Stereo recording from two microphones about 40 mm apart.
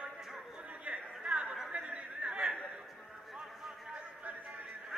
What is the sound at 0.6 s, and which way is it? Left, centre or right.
Chatter, right.